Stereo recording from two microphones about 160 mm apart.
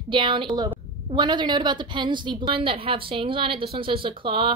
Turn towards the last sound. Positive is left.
turn(degrees=-30)  # may be behind; listen again after turning